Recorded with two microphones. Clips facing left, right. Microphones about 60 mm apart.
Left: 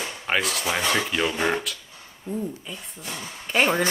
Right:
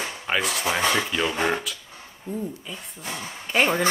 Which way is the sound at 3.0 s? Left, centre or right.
Right.